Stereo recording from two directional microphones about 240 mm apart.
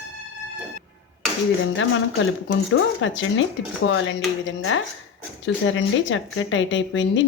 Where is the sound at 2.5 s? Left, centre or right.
Left.